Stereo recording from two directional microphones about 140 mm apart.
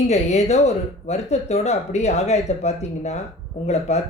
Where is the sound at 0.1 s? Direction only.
50° left (ahead or behind).